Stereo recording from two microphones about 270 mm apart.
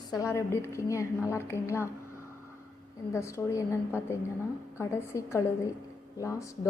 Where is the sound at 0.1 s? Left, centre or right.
Centre.